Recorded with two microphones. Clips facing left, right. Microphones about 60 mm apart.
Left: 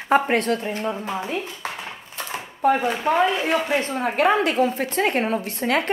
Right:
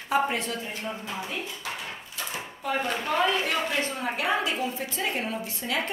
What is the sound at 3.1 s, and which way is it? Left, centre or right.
Speech, left.